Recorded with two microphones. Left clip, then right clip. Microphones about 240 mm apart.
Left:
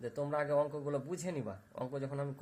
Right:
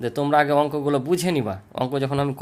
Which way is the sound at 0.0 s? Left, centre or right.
Right.